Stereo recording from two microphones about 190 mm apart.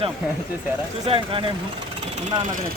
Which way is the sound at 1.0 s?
30° right (ahead or behind).